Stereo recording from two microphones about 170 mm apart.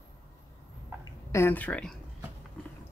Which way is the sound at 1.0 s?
15° left (ahead or behind).